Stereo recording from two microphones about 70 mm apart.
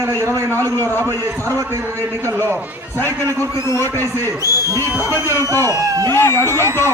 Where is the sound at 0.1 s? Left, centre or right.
Right.